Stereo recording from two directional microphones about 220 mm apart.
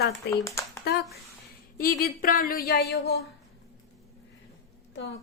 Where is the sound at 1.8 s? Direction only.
40° left (ahead or behind).